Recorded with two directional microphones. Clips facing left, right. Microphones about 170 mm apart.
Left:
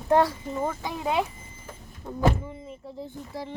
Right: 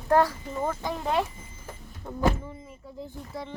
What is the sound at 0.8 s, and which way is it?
Speech, 10° left (ahead or behind).